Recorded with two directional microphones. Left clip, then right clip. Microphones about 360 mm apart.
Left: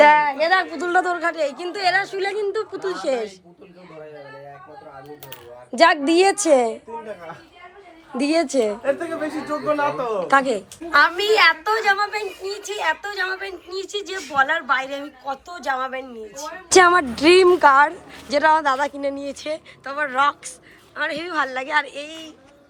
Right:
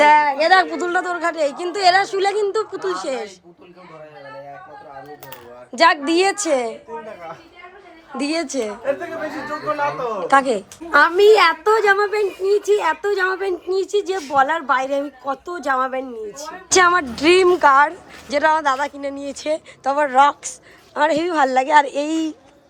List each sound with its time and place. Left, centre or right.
0.0 s a sound: centre
0.8 s a woman's voice: centre
5.7 s a woman's voice: centre
8.1 s a woman's voice: centre
10.2 s a woman's voice: centre
10.9 s a woman's voice: centre
16.6 s a woman's voice: centre